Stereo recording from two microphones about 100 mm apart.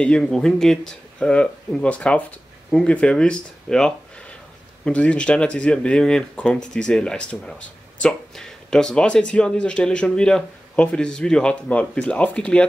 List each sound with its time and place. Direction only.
0.0 s speech: 5° left (ahead or behind)